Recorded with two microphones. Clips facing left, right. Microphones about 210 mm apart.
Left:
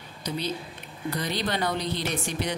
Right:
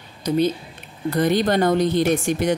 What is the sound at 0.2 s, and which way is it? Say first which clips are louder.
A woman's voice: right 11 dB; 45° right (ahead or behind).